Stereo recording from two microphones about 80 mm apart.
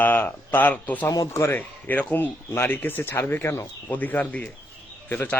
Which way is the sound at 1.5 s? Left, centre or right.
Centre.